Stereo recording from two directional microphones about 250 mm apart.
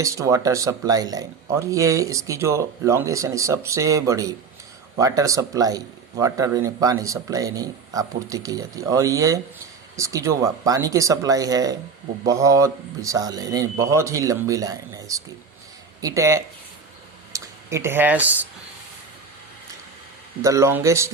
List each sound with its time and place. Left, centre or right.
0.0 s speech: centre
20.4 s speech: centre